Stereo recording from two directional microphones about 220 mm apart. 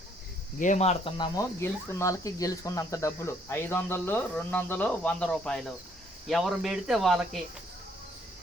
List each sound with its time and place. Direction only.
0.6 s speech: 30° left (ahead or behind); by 7.2 s centre (ahead or behind)